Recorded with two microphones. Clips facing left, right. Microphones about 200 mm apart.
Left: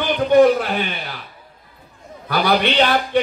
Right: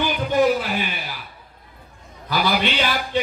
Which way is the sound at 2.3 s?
60° left (ahead or behind).